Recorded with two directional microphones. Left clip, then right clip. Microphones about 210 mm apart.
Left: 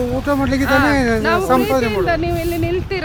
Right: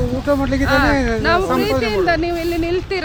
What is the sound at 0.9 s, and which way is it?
Speech, 45° left (ahead or behind).